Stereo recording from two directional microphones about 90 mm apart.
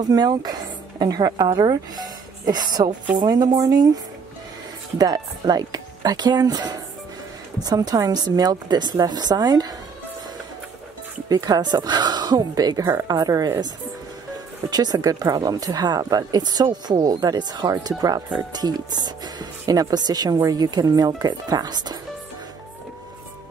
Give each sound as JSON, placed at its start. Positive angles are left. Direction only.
{"t": 0.0, "sound": "speech", "side_deg": -50}
{"t": 4.9, "sound": "speech", "side_deg": -45}
{"t": 11.2, "sound": "speech", "side_deg": -45}
{"t": 14.7, "sound": "speech", "side_deg": -45}